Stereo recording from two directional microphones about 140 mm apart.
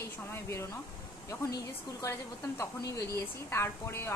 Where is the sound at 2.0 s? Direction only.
25° left (ahead or behind).